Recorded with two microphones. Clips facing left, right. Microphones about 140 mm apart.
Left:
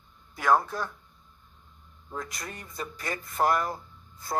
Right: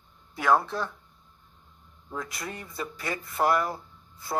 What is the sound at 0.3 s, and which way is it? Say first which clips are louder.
Speech: even; 10° right (ahead or behind).